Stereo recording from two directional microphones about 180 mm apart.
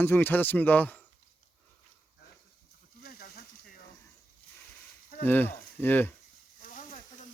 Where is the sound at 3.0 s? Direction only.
60° left (ahead or behind).